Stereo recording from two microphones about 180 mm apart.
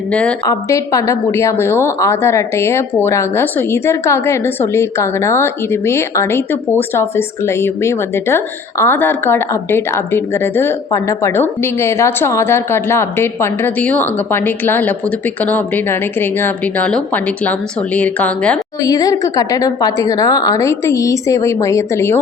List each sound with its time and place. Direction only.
0.1 s a woman's voice: 5° left (ahead or behind)
0.4 s a woman's voice: 20° left (ahead or behind)
18.8 s a woman's voice: 20° left (ahead or behind)